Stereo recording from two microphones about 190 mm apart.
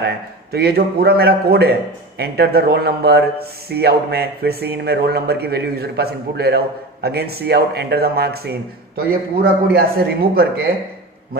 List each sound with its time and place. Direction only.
0.0 s speech: 55° right (ahead or behind)